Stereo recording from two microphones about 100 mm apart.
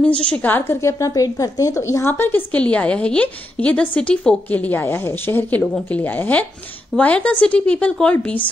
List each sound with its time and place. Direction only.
0.2 s speech: 15° left (ahead or behind)
0.7 s a woman's voice: 30° left (ahead or behind); by 8.4 s 15° left (ahead or behind)